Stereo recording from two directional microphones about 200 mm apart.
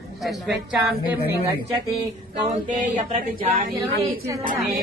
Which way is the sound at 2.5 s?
40° right (ahead or behind).